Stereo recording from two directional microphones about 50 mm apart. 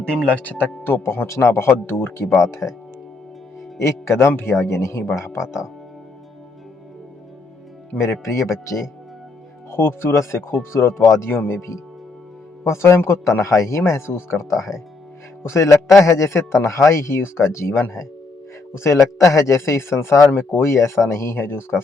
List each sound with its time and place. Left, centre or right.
0.3 s speech: left
1.0 s a man's voice: left
2.4 s speech: left
3.8 s speech: left
8.2 s speech: left
9.7 s a man's voice: left
15.4 s speech: left
16.0 s a man's voice: left
19.2 s a man's voice: left